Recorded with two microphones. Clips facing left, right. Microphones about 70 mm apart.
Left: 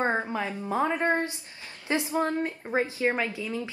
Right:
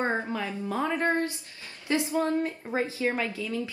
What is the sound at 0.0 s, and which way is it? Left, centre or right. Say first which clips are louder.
A woman's voice: left 2 dB; left.